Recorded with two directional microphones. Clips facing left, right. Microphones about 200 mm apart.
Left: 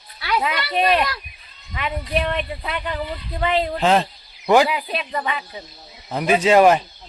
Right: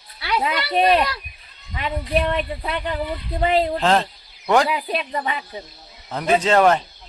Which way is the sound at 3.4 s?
40° right (ahead or behind).